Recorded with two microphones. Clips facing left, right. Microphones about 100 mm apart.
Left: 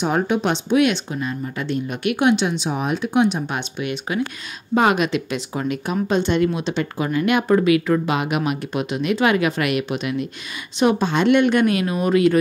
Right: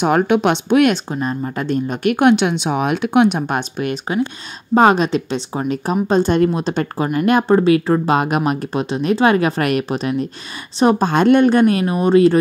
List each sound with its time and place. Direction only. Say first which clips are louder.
0.0 s speech: right 5 dB; 70° right (ahead or behind)
0.9 s speech: right 4 dB; 40° right (ahead or behind); by 3.5 s 60° right (ahead or behind)
3.5 s speech: right 5 dB; 40° right (ahead or behind)